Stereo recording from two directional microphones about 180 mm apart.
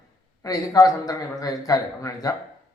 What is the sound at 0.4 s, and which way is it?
A man's voice, 20° left (ahead or behind).